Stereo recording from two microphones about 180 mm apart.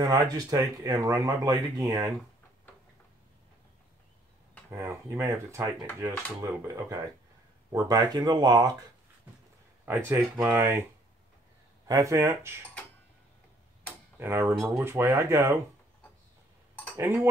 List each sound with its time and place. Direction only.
0.0 s speech: 20° right (ahead or behind)
4.6 s speech: 15° right (ahead or behind)
9.8 s speech: 10° right (ahead or behind)
11.9 s speech: 15° right (ahead or behind)
14.2 s speech: 15° right (ahead or behind)
16.9 s speech: 15° right (ahead or behind)